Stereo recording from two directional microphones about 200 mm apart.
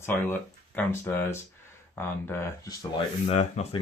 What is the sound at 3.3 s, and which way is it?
Speech, 35° left (ahead or behind).